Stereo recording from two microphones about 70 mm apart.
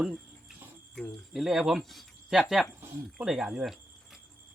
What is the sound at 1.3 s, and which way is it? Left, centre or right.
Speech, centre.